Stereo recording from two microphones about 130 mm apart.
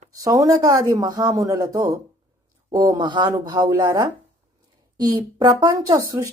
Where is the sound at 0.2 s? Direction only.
25° right (ahead or behind).